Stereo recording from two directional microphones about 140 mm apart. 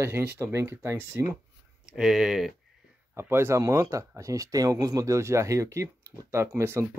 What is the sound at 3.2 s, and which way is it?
Speech, 15° right (ahead or behind).